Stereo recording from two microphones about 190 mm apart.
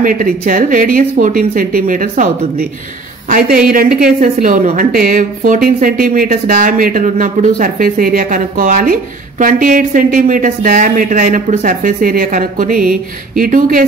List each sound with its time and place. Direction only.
0.0 s a woman's voice: 45° right (ahead or behind)